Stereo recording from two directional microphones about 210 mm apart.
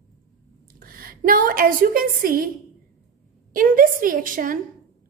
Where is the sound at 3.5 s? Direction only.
40° right (ahead or behind).